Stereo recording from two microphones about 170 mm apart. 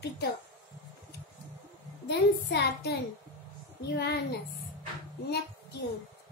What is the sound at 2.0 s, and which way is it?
Speech, 90° left.